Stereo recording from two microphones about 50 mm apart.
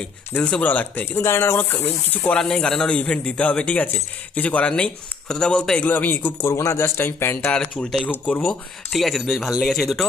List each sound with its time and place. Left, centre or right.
0.6 s speech: left
1.0 s speech: left
2.3 s a man's voice: centre
5.9 s speech: left
6.4 s speech: left
7.0 s speech: left
7.5 s a man's voice: centre
8.4 s speech: centre